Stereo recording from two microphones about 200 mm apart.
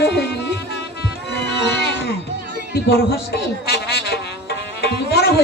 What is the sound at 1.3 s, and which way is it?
Music, 60° left (ahead or behind).